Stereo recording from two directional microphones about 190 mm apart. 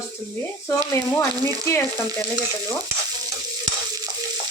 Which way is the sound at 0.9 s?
15° left (ahead or behind).